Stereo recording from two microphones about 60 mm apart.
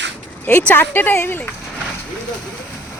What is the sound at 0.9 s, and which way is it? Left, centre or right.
Speech, left.